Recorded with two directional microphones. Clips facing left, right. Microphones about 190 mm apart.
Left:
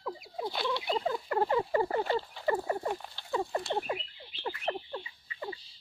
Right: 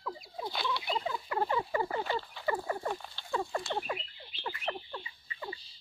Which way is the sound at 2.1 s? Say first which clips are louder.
Left 4 dB; 25° left (ahead or behind).